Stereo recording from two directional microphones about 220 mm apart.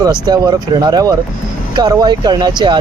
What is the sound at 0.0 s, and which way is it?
Speech, 15° right (ahead or behind).